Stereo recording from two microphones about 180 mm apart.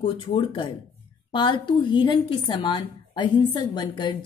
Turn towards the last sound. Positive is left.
turn(degrees=25)  # may be behind; listen again after turning